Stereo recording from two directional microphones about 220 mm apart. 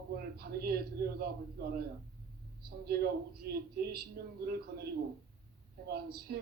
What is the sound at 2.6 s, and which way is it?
A man's voice, 45° right (ahead or behind).